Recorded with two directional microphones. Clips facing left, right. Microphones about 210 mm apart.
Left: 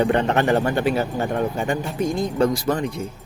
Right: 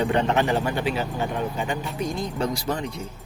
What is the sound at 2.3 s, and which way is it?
Speech, 50° left (ahead or behind).